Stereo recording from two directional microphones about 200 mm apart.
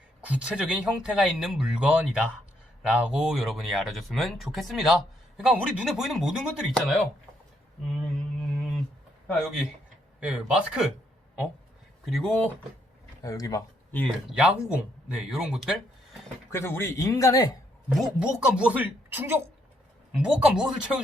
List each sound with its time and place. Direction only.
0.3 s speech: 5° right (ahead or behind)
9.2 s speech: centre (ahead or behind)
12.0 s speech: centre (ahead or behind)
13.2 s speech: 15° left (ahead or behind)
14.3 s speech: 5° right (ahead or behind)
16.5 s speech: 10° left (ahead or behind)
17.8 s speech: centre (ahead or behind)